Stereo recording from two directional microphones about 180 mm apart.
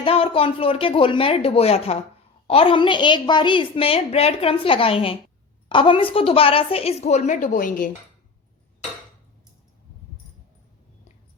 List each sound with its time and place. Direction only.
0.0 s a woman's voice: 30° left (ahead or behind); by 7.9 s 45° left (ahead or behind)